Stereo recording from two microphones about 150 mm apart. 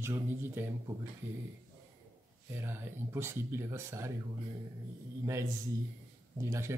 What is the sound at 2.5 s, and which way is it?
Speech, 15° right (ahead or behind).